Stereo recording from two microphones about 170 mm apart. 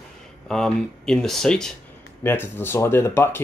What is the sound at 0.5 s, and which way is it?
Speech, 5° left (ahead or behind).